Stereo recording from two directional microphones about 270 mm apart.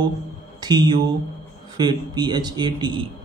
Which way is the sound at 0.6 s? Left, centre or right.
Centre.